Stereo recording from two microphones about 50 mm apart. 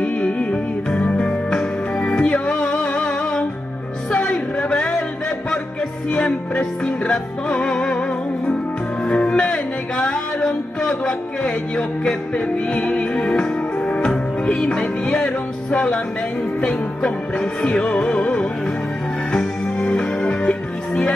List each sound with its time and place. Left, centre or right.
0.0 s music: left
4.1 s a sound: left
6.1 s music: left
9.0 s music: left
19.9 s music: centre